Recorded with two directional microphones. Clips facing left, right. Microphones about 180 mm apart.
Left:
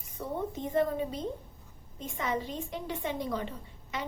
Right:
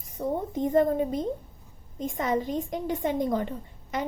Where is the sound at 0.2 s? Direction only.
45° right (ahead or behind).